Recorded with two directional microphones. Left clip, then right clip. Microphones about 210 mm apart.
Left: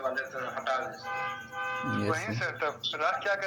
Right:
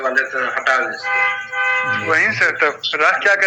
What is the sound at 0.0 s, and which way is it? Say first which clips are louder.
A man's voice: right 15 dB; 45° right (ahead or behind).